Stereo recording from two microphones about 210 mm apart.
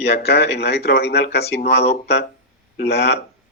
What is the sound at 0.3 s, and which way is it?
A man's voice, 50° left (ahead or behind).